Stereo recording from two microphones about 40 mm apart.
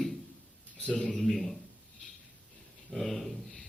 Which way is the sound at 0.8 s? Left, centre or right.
Left.